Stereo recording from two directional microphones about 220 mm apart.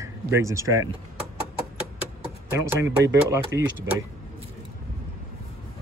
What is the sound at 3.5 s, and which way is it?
Speech, 55° right (ahead or behind).